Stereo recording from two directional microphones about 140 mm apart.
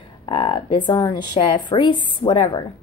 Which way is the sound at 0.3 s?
40° left (ahead or behind).